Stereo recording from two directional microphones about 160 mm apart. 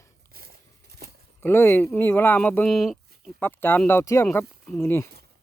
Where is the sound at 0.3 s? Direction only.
75° right (ahead or behind).